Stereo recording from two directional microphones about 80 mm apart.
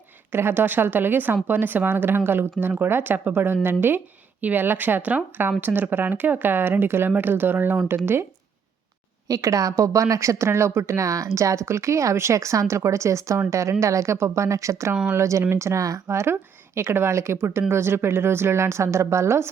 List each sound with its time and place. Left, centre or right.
0.3 s a woman's voice: right
9.2 s speech: right